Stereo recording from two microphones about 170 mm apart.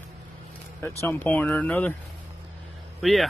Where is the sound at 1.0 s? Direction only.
10° left (ahead or behind).